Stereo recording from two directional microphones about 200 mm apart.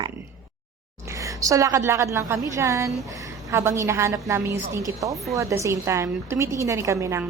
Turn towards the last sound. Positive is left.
turn(degrees=-15)  # may be behind; listen again after turning